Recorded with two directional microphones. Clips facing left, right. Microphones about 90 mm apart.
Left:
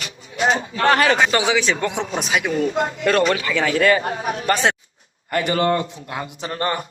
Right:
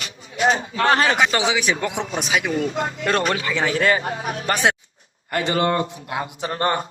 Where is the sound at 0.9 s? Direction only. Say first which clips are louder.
Left 2 dB; 25° right (ahead or behind).